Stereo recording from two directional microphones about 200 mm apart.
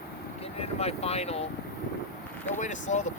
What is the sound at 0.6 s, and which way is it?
Speech, 30° left (ahead or behind).